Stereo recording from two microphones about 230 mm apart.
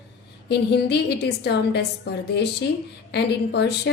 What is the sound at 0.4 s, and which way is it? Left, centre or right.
A woman's voice, left.